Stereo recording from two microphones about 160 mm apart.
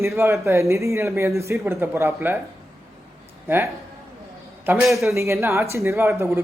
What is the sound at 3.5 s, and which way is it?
Speech, 15° right (ahead or behind).